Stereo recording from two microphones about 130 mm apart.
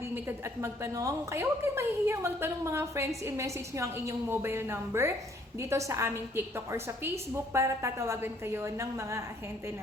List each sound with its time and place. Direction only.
0.1 s a woman's voice: 20° right (ahead or behind)